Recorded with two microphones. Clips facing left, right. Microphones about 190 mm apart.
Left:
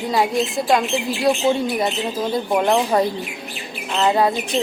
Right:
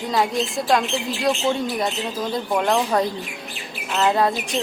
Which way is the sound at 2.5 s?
15° left (ahead or behind).